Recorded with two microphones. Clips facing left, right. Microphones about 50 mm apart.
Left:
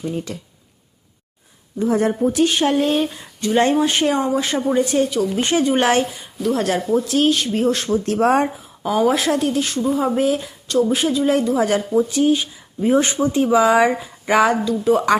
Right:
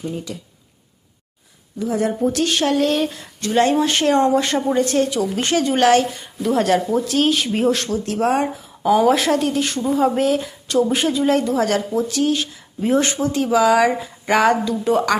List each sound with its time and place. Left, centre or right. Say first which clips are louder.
1.8 s speech: left 3 dB; left
2.2 s speech: left 2 dB; centre
5.4 s speech: right 1 dB; left
6.4 s speech: right 2 dB; centre
7.9 s speech: left 3 dB; left
8.1 s speech: left 2 dB; left
8.8 s speech: right 2 dB; centre; by 13.9 s left
14.0 s speech: even; centre